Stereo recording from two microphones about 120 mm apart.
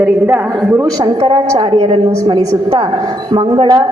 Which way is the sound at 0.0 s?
15° right (ahead or behind).